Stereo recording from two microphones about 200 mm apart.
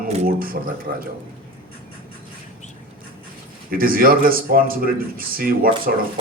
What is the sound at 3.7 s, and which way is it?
A man's voice, 45° right (ahead or behind).